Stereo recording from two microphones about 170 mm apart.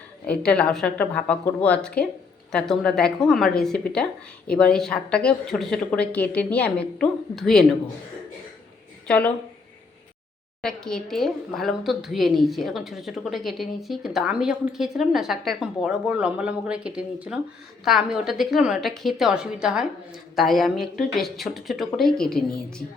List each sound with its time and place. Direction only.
0.3 s speech: 5° left (ahead or behind)
9.0 s a woman's voice: 10° left (ahead or behind)
10.6 s speech: 5° left (ahead or behind)